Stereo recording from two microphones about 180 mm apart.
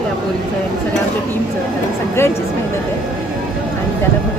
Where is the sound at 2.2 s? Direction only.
15° left (ahead or behind).